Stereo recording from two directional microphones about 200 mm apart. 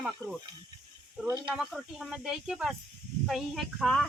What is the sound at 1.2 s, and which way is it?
Speech, 20° right (ahead or behind).